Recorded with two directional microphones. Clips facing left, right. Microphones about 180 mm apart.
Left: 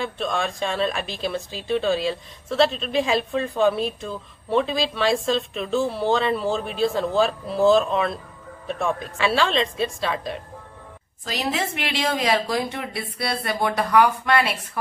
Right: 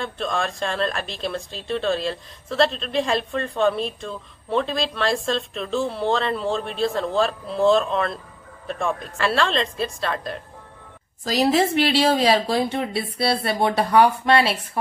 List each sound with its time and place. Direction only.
0.0 s a woman's voice: centre (ahead or behind)
11.2 s a woman's voice: 35° right (ahead or behind)